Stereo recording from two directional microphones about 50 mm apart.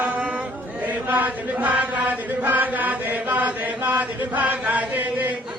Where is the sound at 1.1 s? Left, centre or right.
Right.